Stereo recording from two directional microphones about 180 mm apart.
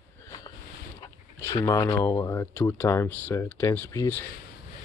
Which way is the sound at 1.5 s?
20° left (ahead or behind).